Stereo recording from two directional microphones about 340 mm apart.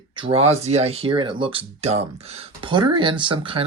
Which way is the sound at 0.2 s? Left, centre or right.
Centre.